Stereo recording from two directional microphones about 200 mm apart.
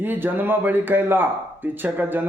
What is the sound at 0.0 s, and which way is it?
Speech, 10° right (ahead or behind).